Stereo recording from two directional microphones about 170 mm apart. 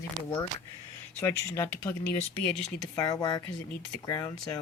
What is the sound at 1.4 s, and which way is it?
Speech, 15° left (ahead or behind).